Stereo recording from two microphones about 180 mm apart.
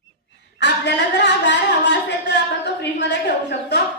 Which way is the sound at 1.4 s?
75° left (ahead or behind).